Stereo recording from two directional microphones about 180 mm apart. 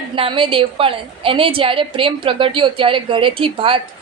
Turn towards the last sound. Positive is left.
turn(degrees=-30)  # may be behind; listen again after turning